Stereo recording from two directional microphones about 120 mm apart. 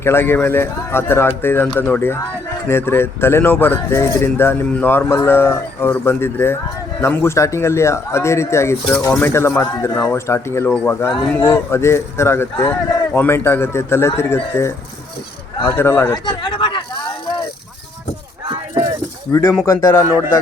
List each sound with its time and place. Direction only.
0.0 s speech: 20° left (ahead or behind)
12.5 s speech: 35° left (ahead or behind)
13.1 s speech: 20° left (ahead or behind)
16.1 s a sound: 40° left (ahead or behind)
19.3 s speech: 25° left (ahead or behind)
20.1 s speech: 20° right (ahead or behind)